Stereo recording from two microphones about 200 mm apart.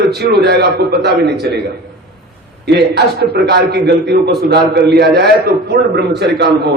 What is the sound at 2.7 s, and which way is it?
A man's voice, 55° right (ahead or behind).